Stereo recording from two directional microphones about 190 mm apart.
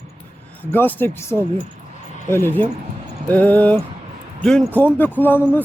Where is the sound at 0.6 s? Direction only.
10° left (ahead or behind).